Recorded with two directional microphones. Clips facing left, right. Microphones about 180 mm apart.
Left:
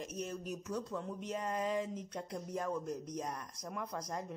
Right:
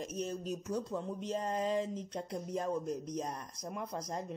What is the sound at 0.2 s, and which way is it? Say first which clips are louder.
Speech: right 4 dB; 30° right (ahead or behind).